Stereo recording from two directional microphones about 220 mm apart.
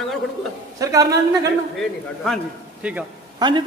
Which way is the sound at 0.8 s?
15° right (ahead or behind).